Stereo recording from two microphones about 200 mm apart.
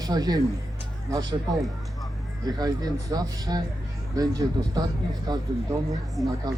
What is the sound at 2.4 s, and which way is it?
Speech, 20° right (ahead or behind).